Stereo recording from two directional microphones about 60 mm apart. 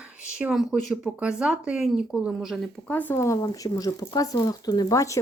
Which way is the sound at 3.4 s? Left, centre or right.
Left.